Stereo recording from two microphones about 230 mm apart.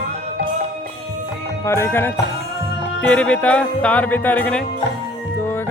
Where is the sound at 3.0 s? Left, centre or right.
Centre.